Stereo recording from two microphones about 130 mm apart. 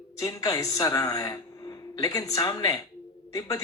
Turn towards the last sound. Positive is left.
turn(degrees=25)  # may be behind; listen again after turning